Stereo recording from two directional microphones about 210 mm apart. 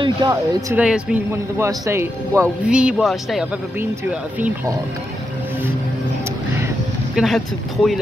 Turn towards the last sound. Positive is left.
turn(degrees=0)  # may be behind; listen again after turning